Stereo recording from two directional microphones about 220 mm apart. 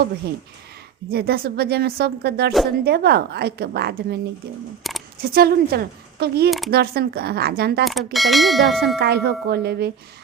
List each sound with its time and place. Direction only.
1.1 s speech: 45° right (ahead or behind)
4.8 s a sound: centre (ahead or behind)
5.2 s speech: 45° right (ahead or behind)
7.9 s clang: centre (ahead or behind)
9.0 s speech: 45° right (ahead or behind)